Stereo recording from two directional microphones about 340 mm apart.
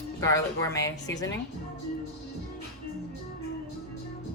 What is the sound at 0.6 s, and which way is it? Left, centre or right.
Speech, centre.